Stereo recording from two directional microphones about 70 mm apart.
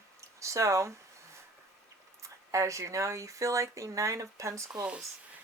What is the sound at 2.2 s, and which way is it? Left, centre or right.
Speech, right.